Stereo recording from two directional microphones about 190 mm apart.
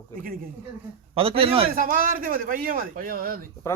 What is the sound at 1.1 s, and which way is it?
Speech, 30° right (ahead or behind).